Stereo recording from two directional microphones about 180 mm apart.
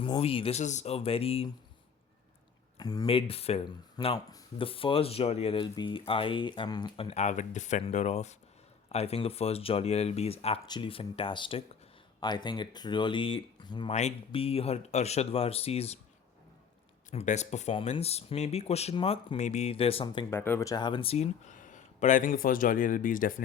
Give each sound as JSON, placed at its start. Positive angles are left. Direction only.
{"t": 0.0, "sound": "speech", "side_deg": 30}
{"t": 2.7, "sound": "speech", "side_deg": 20}
{"t": 3.1, "sound": "speech", "side_deg": 30}
{"t": 13.9, "sound": "speech", "side_deg": 35}
{"t": 17.1, "sound": "speech", "side_deg": 40}
{"t": 20.3, "sound": "speech", "side_deg": 10}